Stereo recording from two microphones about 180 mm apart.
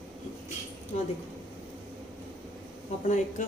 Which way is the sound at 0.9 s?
40° left (ahead or behind).